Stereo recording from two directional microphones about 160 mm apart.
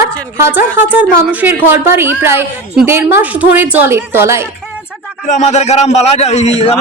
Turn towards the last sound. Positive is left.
turn(degrees=40)  # may be behind; listen again after turning